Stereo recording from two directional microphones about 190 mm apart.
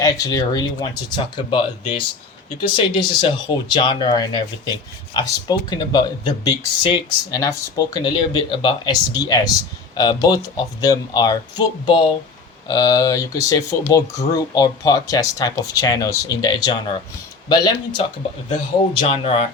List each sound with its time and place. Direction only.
0.0 s speech: 20° left (ahead or behind)